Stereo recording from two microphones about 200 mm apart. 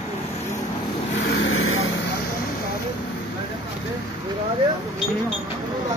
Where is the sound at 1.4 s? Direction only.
90° left.